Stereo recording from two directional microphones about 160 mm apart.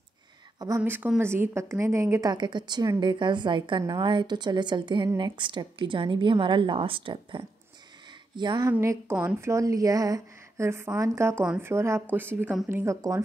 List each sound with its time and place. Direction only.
0.7 s a woman's voice: 10° right (ahead or behind); by 8.7 s 25° right (ahead or behind)
8.7 s speech: 15° right (ahead or behind)